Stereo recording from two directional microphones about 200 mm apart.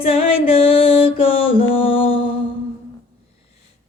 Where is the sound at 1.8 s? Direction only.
25° left (ahead or behind).